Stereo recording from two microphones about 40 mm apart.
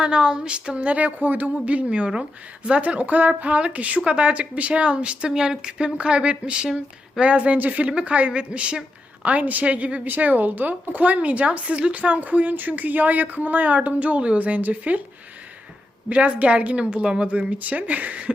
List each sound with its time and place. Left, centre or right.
0.0 s speech: right
0.9 s a woman's voice: right
1.6 s a woman's voice: right
9.2 s a woman's voice: right
16.0 s a woman's voice: right